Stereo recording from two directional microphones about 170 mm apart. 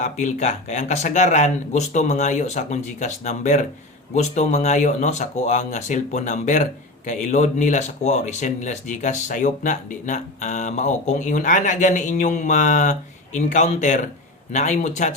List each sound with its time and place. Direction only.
0.0 s speech: 45° left (ahead or behind)